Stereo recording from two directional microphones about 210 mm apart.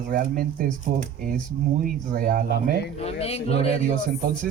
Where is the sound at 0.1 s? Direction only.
40° right (ahead or behind).